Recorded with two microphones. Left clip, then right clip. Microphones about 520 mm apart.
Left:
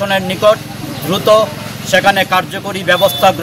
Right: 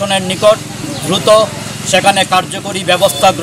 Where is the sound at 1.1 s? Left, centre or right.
Left.